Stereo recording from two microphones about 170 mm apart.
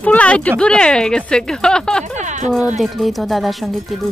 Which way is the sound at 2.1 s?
45° right (ahead or behind).